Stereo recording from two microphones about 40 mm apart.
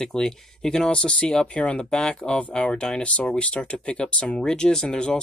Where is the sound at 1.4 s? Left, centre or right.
Left.